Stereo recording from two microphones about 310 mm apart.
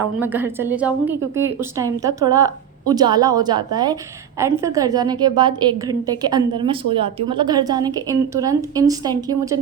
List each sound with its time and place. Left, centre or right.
0.0 s a woman's voice: centre